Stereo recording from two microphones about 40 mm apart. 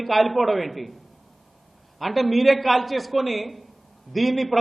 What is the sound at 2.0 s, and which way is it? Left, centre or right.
A man's voice, centre.